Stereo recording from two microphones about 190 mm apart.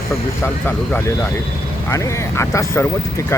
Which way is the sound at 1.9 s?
15° left (ahead or behind).